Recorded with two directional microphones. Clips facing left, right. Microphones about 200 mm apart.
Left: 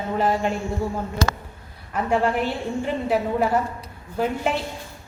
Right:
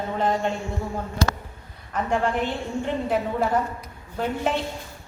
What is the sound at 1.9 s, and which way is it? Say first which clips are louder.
Speech: left 2 dB; 10° left (ahead or behind).